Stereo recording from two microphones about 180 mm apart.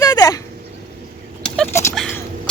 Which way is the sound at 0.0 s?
20° left (ahead or behind).